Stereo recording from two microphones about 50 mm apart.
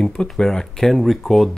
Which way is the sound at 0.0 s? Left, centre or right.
Centre.